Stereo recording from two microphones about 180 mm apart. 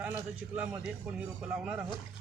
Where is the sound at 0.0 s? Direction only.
10° right (ahead or behind).